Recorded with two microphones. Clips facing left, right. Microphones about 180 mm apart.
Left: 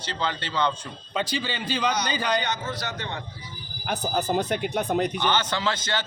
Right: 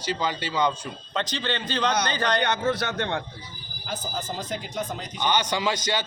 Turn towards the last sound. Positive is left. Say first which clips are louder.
# right 1 dB
turn(degrees=-10)  # may be behind; listen again after turning